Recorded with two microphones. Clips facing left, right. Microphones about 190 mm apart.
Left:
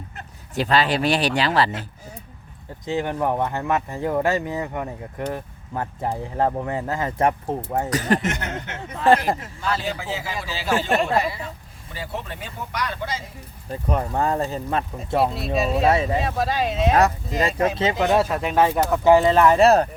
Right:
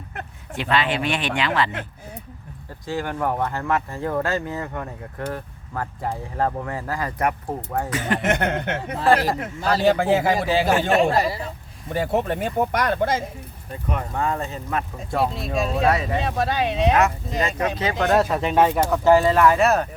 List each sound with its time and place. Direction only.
0.5 s speech: 35° left (ahead or behind)
2.8 s speech: 20° left (ahead or behind)
7.9 s speech: 40° left (ahead or behind)
8.2 s speech: 60° right (ahead or behind)
9.0 s speech: 35° right (ahead or behind)
9.8 s speech: 55° right (ahead or behind)
11.1 s speech: 35° right (ahead or behind)
11.9 s speech: 50° right (ahead or behind)
13.7 s speech: 35° left (ahead or behind)
15.5 s speech: centre (ahead or behind)
15.9 s speech: 25° left (ahead or behind)
16.1 s speech: centre (ahead or behind)
17.9 s speech: centre (ahead or behind)
19.1 s speech: 25° left (ahead or behind)